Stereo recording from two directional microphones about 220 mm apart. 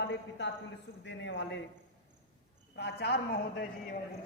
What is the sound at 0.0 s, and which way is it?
A woman's voice, 55° left (ahead or behind).